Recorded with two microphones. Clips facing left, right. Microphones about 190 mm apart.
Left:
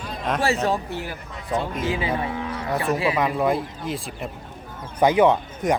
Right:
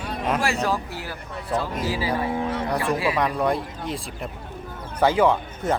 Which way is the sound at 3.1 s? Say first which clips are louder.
Left 1 dB; centre (ahead or behind).